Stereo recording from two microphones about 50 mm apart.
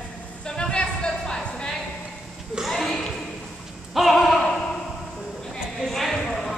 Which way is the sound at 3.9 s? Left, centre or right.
Centre.